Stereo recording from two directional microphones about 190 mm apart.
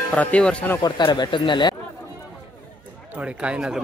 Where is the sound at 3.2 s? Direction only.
5° right (ahead or behind).